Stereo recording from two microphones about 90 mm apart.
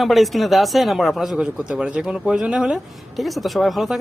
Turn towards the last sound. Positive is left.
turn(degrees=0)  # may be behind; listen again after turning